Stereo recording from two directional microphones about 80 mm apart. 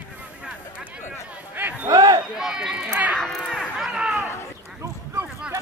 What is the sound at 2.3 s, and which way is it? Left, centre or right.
Run, centre.